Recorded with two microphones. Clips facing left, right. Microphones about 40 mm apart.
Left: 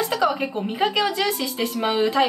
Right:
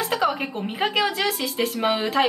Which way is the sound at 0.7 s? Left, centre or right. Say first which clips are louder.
Left 1 dB; centre.